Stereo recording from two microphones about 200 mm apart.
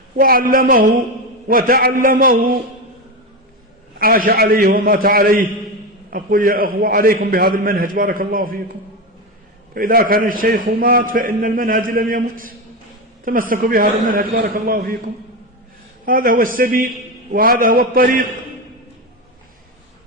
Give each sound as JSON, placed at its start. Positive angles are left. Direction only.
{"t": 0.2, "sound": "a man's voice", "side_deg": -45}
{"t": 3.9, "sound": "a man's voice", "side_deg": -45}
{"t": 9.7, "sound": "a man's voice", "side_deg": -45}
{"t": 16.0, "sound": "a man's voice", "side_deg": -45}